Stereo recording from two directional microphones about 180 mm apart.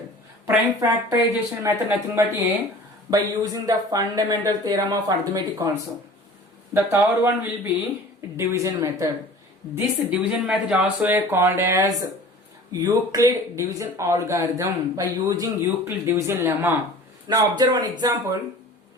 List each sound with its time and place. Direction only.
0.4 s speech: 10° right (ahead or behind)
6.7 s speech: 15° right (ahead or behind)
9.7 s speech: 5° right (ahead or behind)
17.2 s speech: 25° right (ahead or behind)